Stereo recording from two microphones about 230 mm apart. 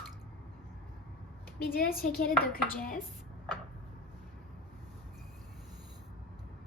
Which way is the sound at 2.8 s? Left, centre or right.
Left.